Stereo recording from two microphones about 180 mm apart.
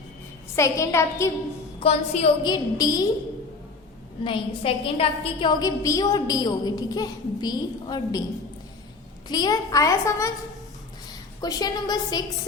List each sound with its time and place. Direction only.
0.5 s a woman's voice: 15° left (ahead or behind)
1.8 s a woman's voice: 35° left (ahead or behind)
2.4 s a woman's voice: 20° left (ahead or behind)
4.2 s a woman's voice: 30° left (ahead or behind)
9.3 s a woman's voice: 20° left (ahead or behind)
11.3 s a woman's voice: 20° left (ahead or behind)